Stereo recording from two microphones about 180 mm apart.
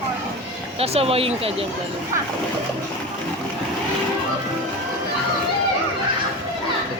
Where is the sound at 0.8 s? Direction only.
35° right (ahead or behind).